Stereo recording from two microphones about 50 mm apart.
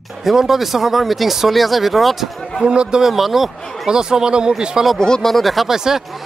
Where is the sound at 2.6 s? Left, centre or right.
Centre.